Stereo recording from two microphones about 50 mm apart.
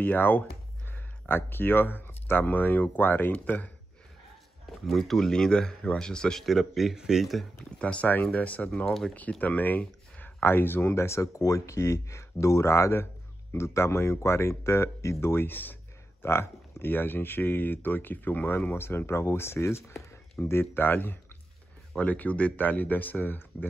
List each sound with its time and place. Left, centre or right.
0.0 s speech: left
4.6 s speech: centre
6.4 s a man's voice: centre
7.8 s speech: left
8.7 s speech: centre
9.4 s a sound: left
10.4 s speech: left
15.4 s a sound: left
16.3 s speech: left
20.7 s speech: left
21.9 s speech: left